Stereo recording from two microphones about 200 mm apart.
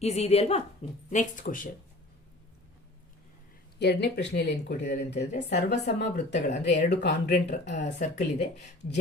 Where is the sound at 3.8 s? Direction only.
55° left (ahead or behind).